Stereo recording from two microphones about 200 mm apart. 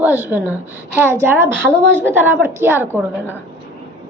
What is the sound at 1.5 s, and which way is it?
Speech, 5° left (ahead or behind).